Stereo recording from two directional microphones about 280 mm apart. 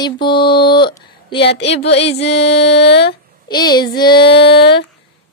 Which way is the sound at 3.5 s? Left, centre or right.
Centre.